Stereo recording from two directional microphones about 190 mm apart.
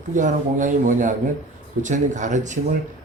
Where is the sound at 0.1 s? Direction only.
40° right (ahead or behind).